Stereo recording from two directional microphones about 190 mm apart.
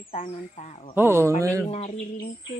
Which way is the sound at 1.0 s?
15° right (ahead or behind).